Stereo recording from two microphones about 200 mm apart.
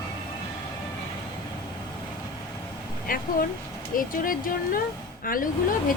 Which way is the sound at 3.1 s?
45° left (ahead or behind).